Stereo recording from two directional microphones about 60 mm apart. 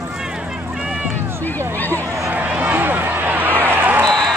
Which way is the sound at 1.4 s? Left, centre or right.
Left.